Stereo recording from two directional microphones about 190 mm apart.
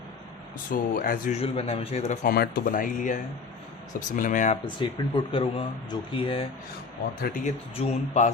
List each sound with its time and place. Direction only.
0.7 s speech: 45° left (ahead or behind)
1.4 s speech: 30° left (ahead or behind)
2.2 s speech: 50° left (ahead or behind)
4.6 s speech: 25° left (ahead or behind)
7.2 s speech: 45° left (ahead or behind)